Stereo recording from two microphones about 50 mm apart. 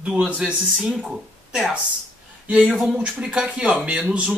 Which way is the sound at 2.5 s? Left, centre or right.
Centre.